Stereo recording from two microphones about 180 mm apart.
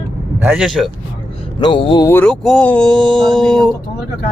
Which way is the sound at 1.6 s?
25° left (ahead or behind).